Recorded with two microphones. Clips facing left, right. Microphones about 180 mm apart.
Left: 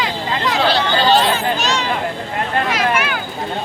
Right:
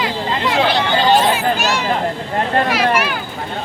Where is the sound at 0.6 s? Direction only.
20° right (ahead or behind); by 3.2 s centre (ahead or behind).